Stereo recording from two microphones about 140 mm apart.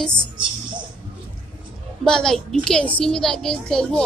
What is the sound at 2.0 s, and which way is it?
Speech, 5° left (ahead or behind).